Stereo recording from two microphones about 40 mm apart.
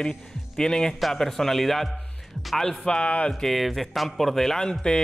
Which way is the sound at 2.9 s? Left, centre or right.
Left.